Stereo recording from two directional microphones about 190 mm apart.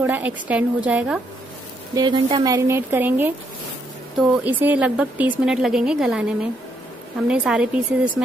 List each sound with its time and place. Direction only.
0.0 s a woman's voice: 10° right (ahead or behind)
2.0 s a woman's voice: 25° right (ahead or behind); by 3.3 s 10° right (ahead or behind)
4.4 s a woman's voice: 10° right (ahead or behind)